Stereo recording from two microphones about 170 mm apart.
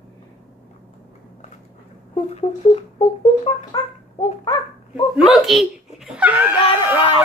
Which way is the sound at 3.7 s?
25° left (ahead or behind).